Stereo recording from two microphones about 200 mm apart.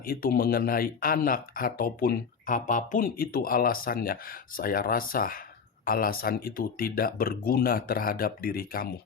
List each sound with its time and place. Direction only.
0.0 s speech: 45° left (ahead or behind)